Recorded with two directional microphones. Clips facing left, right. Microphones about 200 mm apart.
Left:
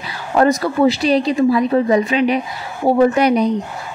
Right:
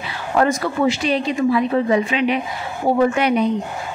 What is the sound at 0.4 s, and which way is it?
A woman's voice, 35° left (ahead or behind).